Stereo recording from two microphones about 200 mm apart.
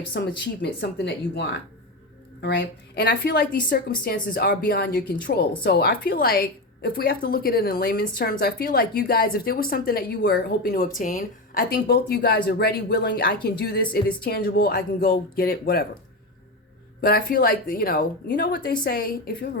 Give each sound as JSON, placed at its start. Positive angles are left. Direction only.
{"t": 0.1, "sound": "a woman's voice", "side_deg": 55}
{"t": 17.0, "sound": "a woman's voice", "side_deg": 45}